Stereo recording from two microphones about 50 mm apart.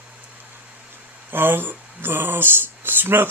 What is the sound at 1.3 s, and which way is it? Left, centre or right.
Speech, right.